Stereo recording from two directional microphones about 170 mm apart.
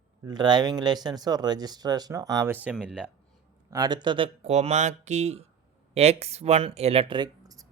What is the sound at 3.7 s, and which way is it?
Speech, 25° right (ahead or behind).